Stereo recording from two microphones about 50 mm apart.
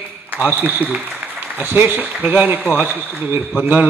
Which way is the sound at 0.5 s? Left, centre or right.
Right.